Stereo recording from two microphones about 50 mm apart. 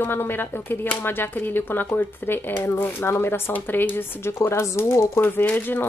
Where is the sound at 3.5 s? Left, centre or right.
Left.